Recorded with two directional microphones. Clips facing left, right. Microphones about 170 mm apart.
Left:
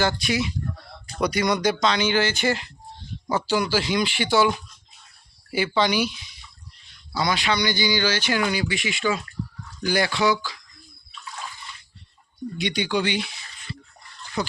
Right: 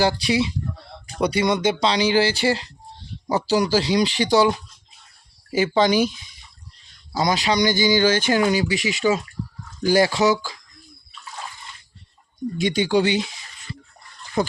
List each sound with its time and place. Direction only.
0.0 s speech: 35° right (ahead or behind)
5.5 s speech: 45° right (ahead or behind)
7.1 s speech: 40° right (ahead or behind)
12.5 s speech: 45° right (ahead or behind)
13.1 s speech: 25° right (ahead or behind)
14.4 s speech: 50° right (ahead or behind)